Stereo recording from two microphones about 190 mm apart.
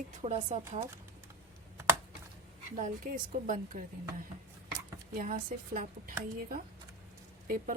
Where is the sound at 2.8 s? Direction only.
45° right (ahead or behind).